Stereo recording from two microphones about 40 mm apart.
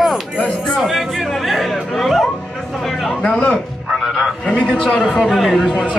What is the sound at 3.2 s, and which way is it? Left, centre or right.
Music, left.